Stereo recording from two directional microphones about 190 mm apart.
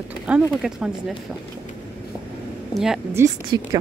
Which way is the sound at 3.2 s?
15° right (ahead or behind).